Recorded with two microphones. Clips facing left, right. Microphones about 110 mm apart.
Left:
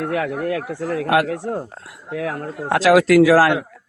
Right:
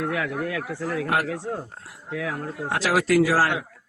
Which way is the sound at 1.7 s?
90° left.